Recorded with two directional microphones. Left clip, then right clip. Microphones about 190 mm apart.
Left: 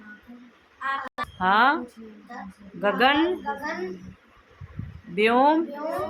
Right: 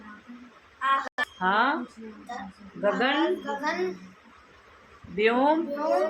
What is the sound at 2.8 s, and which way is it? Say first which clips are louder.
Speech: left 4 dB; 35° left (ahead or behind).